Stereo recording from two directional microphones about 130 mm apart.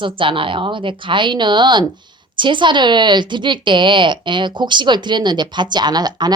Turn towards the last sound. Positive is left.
turn(degrees=-30)  # may be behind; listen again after turning